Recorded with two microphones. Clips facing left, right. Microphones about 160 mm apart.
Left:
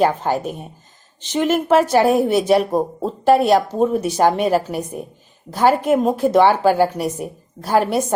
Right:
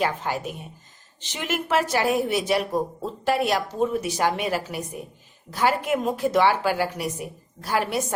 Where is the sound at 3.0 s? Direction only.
30° left (ahead or behind).